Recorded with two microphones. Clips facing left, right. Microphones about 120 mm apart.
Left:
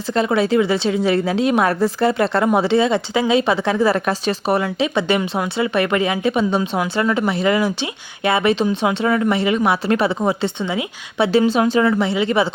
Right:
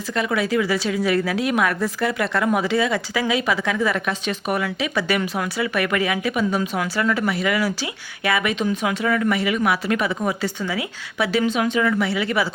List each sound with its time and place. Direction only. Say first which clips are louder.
0.1 s a woman's voice: left 5 dB; 30° left (ahead or behind)